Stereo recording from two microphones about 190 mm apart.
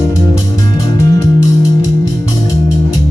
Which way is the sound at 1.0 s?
15° left (ahead or behind).